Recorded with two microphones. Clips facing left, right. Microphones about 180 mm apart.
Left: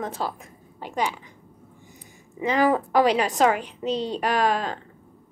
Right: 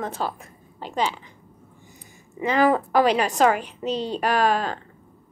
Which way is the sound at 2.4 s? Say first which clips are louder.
Right 1 dB; 20° left (ahead or behind).